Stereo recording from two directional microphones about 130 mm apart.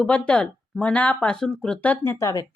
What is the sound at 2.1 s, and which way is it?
Speech, 25° left (ahead or behind).